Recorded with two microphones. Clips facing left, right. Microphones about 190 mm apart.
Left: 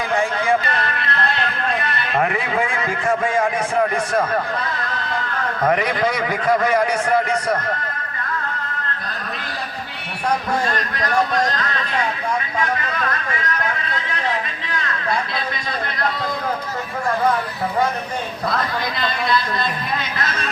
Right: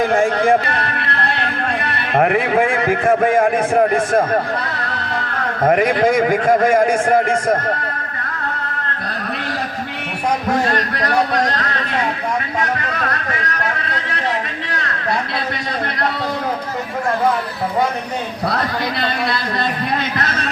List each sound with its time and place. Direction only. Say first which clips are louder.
0.0 s a man's voice: right 6 dB; 50° right (ahead or behind)
5.6 s a man's voice: right 5 dB; 45° right (ahead or behind)
10.7 s a man's voice: right 4 dB; 45° right (ahead or behind)
14.7 s a sound: right 1 dB; 45° right (ahead or behind)
18.4 s a man's voice: right 3 dB; 35° right (ahead or behind)
20.1 s a man's voice: right 3 dB; 45° right (ahead or behind)